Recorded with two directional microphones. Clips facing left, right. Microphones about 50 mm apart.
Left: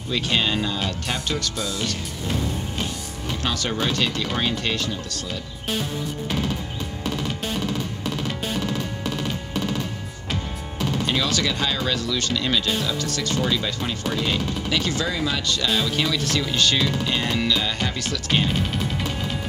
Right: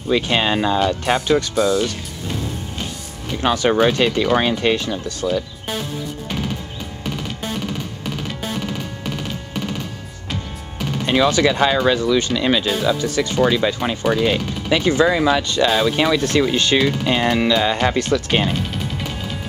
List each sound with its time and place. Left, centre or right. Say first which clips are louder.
0.1 s speech: right 5 dB; right
3.3 s speech: right 10 dB; right
11.1 s speech: right 11 dB; right
18.1 s speech: right 5 dB; right